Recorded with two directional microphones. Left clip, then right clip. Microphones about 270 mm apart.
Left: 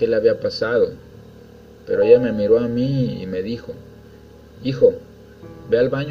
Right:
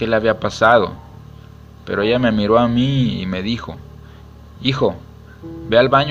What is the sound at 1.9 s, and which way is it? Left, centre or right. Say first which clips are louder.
A man's voice: left 3 dB; right.